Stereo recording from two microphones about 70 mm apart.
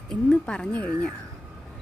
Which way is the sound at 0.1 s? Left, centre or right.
Centre.